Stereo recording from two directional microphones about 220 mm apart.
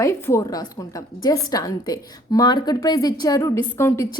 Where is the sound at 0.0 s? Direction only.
15° left (ahead or behind).